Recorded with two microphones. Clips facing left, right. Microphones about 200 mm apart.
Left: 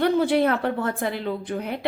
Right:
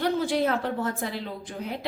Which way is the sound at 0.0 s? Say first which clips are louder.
Left 5 dB; 60° left (ahead or behind).